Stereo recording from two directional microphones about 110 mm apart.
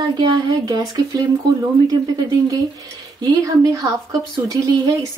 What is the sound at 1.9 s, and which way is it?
A woman's voice, 35° right (ahead or behind).